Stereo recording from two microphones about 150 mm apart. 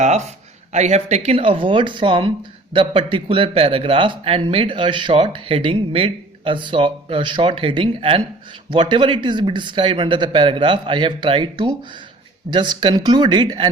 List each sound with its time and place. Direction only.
0.7 s speech: 50° right (ahead or behind); by 13.7 s 30° right (ahead or behind)